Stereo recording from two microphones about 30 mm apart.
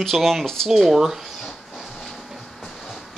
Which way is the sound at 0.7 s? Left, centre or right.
Centre.